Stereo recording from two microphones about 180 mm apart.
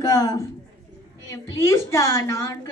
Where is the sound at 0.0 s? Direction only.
20° left (ahead or behind).